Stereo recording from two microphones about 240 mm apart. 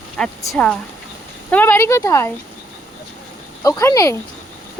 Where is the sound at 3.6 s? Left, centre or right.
Centre.